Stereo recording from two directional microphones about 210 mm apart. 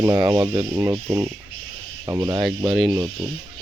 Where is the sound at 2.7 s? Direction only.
Centre (ahead or behind).